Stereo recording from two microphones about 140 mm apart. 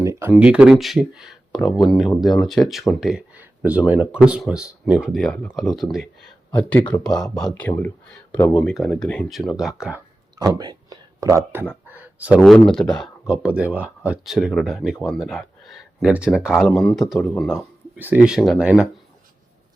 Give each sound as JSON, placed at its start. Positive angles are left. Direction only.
{"t": 0.0, "sound": "speech", "side_deg": -20}
{"t": 10.6, "sound": "speech", "side_deg": -30}
{"t": 11.7, "sound": "a sound", "side_deg": -10}
{"t": 12.4, "sound": "speech", "side_deg": 5}
{"t": 13.3, "sound": "speech", "side_deg": -10}
{"t": 16.6, "sound": "speech", "side_deg": 5}
{"t": 17.9, "sound": "speech", "side_deg": -10}